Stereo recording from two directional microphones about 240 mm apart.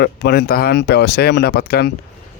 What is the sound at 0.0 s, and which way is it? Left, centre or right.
A man's voice, left.